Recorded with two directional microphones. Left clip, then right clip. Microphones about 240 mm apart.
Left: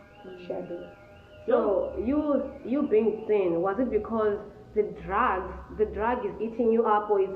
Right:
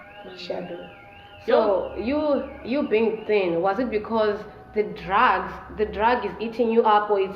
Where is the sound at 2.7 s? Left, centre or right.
Right.